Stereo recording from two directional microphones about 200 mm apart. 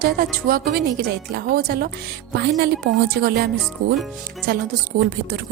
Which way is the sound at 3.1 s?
55° right (ahead or behind).